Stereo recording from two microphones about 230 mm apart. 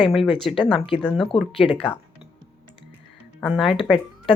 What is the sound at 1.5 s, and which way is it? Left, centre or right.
Speech, left.